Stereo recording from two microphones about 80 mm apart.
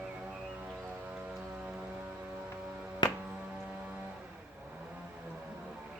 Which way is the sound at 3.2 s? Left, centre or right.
Centre.